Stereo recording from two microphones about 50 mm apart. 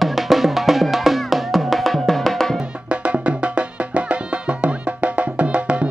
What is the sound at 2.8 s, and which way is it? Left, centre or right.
Music, right.